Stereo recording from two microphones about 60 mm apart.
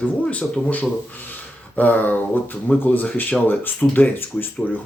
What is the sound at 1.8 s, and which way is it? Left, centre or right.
Speech, left.